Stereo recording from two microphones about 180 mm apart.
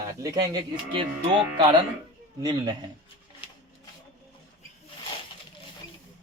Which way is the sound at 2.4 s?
20° right (ahead or behind).